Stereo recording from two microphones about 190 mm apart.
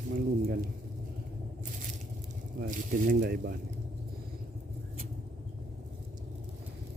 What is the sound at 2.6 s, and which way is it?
Speech, 45° right (ahead or behind).